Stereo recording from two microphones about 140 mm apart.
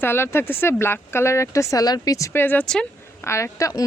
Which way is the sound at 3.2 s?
20° left (ahead or behind).